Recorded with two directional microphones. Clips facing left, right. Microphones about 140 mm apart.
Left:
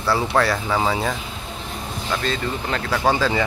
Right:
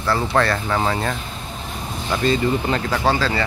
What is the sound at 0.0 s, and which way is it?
Speech, 10° left (ahead or behind).